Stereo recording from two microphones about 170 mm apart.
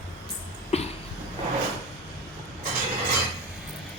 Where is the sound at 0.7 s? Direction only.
40° left (ahead or behind).